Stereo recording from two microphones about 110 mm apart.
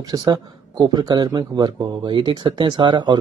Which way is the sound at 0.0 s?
35° right (ahead or behind).